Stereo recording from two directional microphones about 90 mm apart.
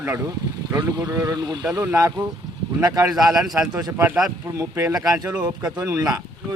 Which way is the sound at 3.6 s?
30° right (ahead or behind).